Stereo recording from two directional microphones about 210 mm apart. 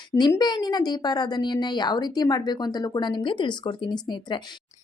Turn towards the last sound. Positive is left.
turn(degrees=20)  # may be behind; listen again after turning